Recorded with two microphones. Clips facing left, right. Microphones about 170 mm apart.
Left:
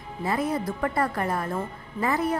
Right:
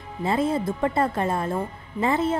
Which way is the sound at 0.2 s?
25° right (ahead or behind).